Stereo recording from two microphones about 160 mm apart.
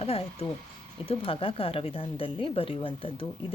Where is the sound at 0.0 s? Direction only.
40° left (ahead or behind).